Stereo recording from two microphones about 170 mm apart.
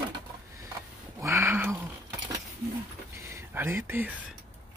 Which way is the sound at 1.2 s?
15° right (ahead or behind).